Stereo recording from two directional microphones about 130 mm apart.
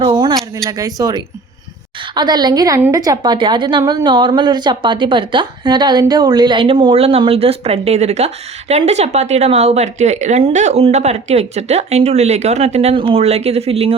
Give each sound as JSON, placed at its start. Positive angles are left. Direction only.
{"t": 0.0, "sound": "a sound", "side_deg": -35}
{"t": 2.1, "sound": "a woman's voice", "side_deg": -35}
{"t": 6.8, "sound": "speech", "side_deg": -50}